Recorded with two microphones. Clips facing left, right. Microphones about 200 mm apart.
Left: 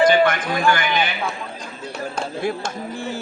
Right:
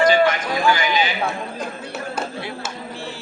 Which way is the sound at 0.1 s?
55° left (ahead or behind).